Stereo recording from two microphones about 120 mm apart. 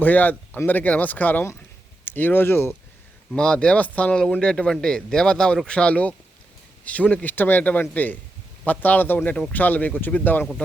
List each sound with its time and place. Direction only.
0.0 s speech: 15° left (ahead or behind)
3.3 s speech: 10° left (ahead or behind)